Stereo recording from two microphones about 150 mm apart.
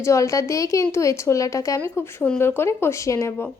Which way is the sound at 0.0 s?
20° left (ahead or behind).